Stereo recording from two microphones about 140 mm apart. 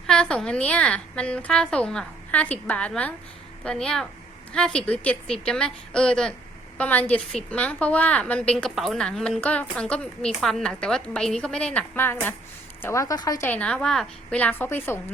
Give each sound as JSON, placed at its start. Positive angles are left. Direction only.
{"t": 0.1, "sound": "a woman's voice", "side_deg": 5}
{"t": 13.5, "sound": "a woman's voice", "side_deg": 10}